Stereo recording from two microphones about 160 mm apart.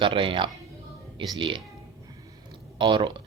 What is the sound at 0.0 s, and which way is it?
Speech, 30° right (ahead or behind).